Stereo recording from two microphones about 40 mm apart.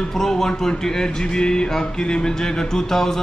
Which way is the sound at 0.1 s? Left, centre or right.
Centre.